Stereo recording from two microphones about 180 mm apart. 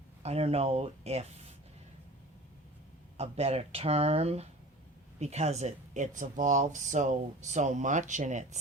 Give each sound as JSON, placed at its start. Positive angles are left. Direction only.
{"t": 0.2, "sound": "speech", "side_deg": -35}
{"t": 3.2, "sound": "speech", "side_deg": -35}